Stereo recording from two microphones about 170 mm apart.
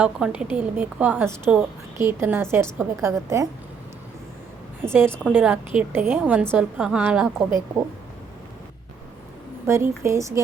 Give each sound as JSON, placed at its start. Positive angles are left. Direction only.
{"t": 0.0, "sound": "a woman's voice", "side_deg": -5}
{"t": 4.8, "sound": "a woman's voice", "side_deg": -15}
{"t": 9.6, "sound": "a woman's voice", "side_deg": -15}